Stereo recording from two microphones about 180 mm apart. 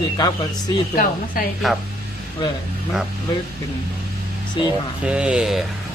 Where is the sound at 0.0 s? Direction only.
20° left (ahead or behind).